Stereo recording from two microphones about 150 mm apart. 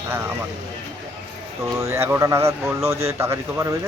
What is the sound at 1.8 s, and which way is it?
Speech, 15° right (ahead or behind).